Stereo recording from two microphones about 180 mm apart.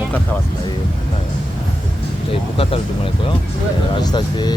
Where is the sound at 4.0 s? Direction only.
25° left (ahead or behind).